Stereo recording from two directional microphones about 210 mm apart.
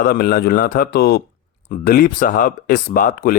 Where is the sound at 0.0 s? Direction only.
45° left (ahead or behind).